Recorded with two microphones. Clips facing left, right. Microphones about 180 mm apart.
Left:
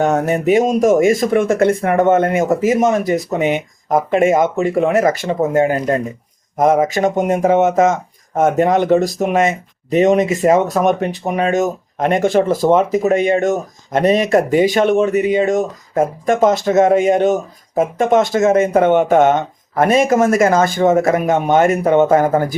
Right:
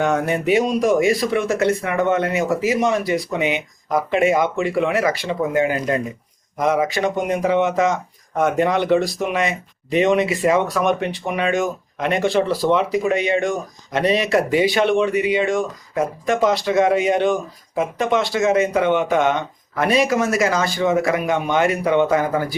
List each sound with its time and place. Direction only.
0.0 s speech: 40° left (ahead or behind)